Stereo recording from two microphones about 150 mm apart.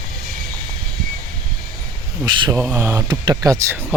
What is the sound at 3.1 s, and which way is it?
Speech, 25° right (ahead or behind).